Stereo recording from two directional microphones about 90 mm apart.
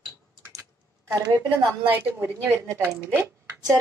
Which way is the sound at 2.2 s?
25° right (ahead or behind).